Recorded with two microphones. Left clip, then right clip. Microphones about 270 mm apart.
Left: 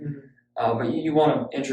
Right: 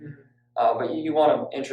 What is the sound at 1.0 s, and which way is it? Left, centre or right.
Speech, centre.